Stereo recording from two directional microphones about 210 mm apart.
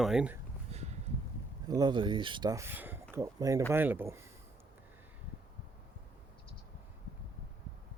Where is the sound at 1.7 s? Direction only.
20° right (ahead or behind).